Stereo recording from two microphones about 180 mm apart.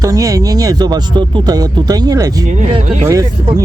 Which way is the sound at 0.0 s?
20° right (ahead or behind).